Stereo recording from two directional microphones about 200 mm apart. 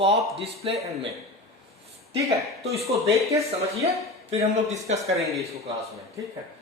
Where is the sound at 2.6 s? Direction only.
30° right (ahead or behind).